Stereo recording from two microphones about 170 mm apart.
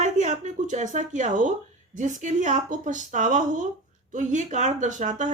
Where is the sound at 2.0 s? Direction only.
45° right (ahead or behind).